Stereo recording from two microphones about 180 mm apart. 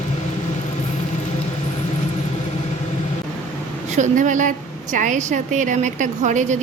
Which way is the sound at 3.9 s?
45° right (ahead or behind).